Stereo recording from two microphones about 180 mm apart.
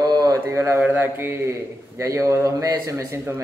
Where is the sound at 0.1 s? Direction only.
20° right (ahead or behind).